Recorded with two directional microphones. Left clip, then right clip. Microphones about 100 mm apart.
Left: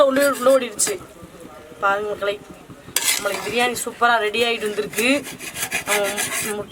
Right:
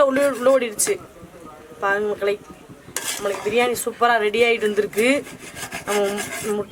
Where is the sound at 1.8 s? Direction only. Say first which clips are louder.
Even; 35° right (ahead or behind).